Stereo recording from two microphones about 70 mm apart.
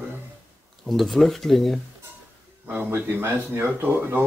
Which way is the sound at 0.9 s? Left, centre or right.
Centre.